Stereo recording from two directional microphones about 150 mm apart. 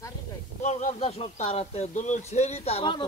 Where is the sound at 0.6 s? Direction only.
50° left (ahead or behind).